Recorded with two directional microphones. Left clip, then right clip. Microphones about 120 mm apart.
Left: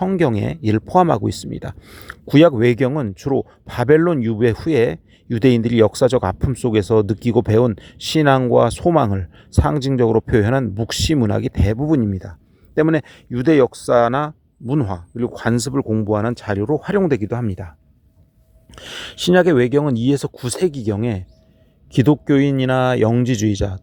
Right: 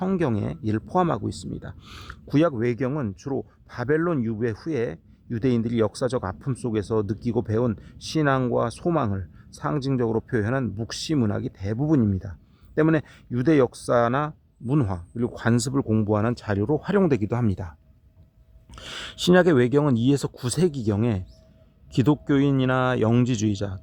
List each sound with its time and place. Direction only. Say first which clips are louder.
0.2 s speech: left 8 dB; 40° left (ahead or behind)
1.8 s speech: left 2 dB; 15° left (ahead or behind)
2.0 s speech: left 10 dB; 40° left (ahead or behind)
17.1 s speech: left 4 dB; 25° left (ahead or behind)
17.5 s speech: left 2 dB; 10° left (ahead or behind)
18.7 s speech: left 5 dB; 25° left (ahead or behind)